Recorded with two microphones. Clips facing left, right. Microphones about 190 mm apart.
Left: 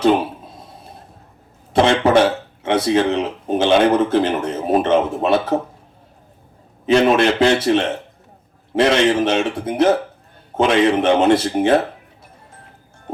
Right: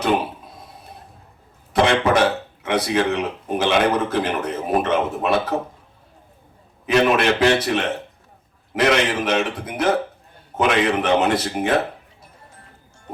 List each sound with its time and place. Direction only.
1.7 s speech: 25° left (ahead or behind)
6.8 s speech: 25° left (ahead or behind)